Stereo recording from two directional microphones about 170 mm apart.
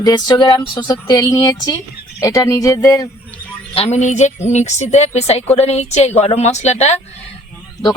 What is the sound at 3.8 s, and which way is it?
A woman's voice, 40° left (ahead or behind).